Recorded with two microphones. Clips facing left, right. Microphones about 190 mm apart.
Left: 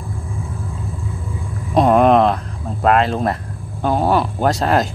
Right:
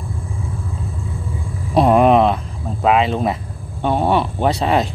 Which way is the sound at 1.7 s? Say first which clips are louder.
Even; 5° right (ahead or behind).